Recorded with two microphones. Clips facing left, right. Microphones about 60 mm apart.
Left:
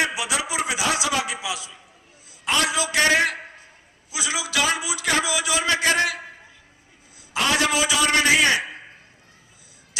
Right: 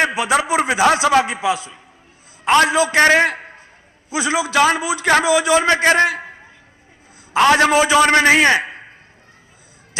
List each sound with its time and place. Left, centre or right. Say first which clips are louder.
0.0 s a man's voice: right 8 dB; right
7.3 s a man's voice: right 9 dB; right